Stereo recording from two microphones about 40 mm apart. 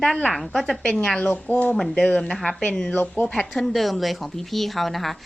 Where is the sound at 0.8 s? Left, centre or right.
Left.